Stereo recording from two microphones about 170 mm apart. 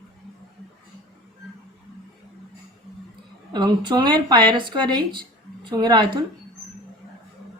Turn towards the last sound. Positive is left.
turn(degrees=-25)  # may be behind; listen again after turning